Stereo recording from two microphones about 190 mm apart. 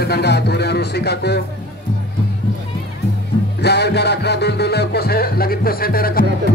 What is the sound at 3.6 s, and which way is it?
Music, 60° left (ahead or behind).